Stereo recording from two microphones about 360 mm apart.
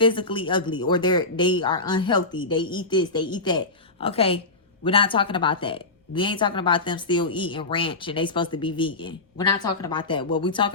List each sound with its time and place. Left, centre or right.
0.0 s a woman's voice: centre